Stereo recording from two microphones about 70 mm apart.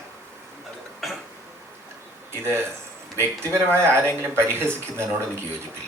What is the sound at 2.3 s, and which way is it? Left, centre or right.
Speech, right.